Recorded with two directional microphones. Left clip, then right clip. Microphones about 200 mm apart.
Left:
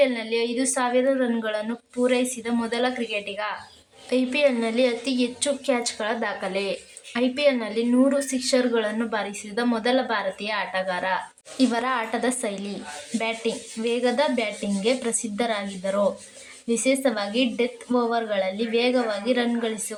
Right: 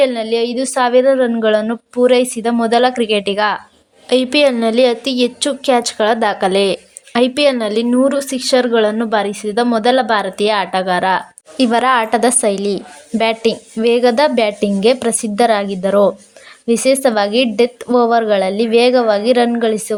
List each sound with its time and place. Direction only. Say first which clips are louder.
0.0 s a woman's voice: right 8 dB; 35° right (ahead or behind)